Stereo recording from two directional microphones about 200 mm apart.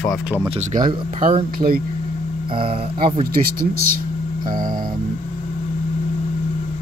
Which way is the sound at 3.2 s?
45° right (ahead or behind).